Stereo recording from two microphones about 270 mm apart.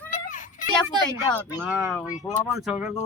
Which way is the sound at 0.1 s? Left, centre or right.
Left.